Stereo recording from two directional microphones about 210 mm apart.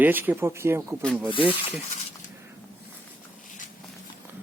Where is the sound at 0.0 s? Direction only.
10° right (ahead or behind).